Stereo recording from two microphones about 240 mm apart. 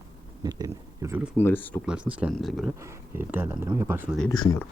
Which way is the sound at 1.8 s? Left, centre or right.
Centre.